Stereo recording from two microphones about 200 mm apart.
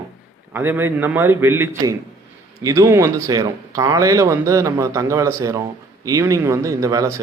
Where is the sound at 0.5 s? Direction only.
10° right (ahead or behind).